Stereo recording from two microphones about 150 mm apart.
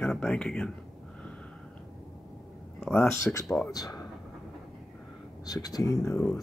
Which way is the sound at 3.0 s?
15° left (ahead or behind).